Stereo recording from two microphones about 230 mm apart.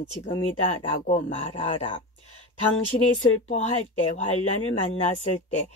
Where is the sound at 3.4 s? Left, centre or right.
Left.